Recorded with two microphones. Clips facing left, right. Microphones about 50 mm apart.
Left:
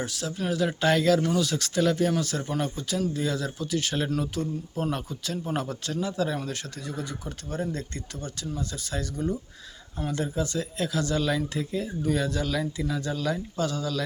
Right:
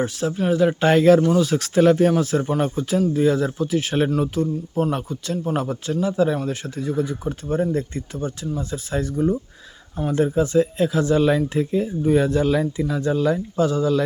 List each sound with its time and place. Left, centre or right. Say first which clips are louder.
0.0 s speech: right 8 dB; right
2.1 s a man's voice: right 8 dB; right